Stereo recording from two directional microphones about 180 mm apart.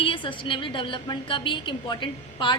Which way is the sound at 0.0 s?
30° left (ahead or behind).